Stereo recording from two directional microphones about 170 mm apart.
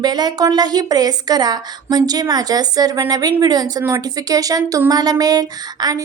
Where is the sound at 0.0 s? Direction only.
25° right (ahead or behind).